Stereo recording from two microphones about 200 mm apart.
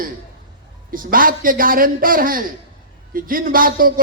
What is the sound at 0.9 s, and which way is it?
A man's voice, 45° right (ahead or behind).